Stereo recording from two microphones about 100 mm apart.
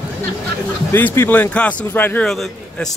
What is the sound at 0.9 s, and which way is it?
Speech, 20° left (ahead or behind).